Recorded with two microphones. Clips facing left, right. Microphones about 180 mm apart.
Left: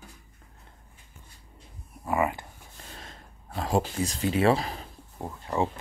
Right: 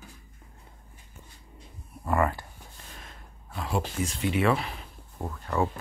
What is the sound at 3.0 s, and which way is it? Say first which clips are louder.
Speech: left 2 dB; 35° left (ahead or behind).